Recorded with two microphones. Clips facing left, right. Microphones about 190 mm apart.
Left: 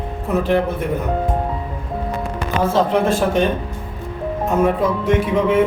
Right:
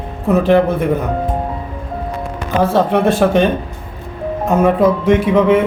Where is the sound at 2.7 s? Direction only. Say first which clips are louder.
Right 2 dB; 65° right (ahead or behind).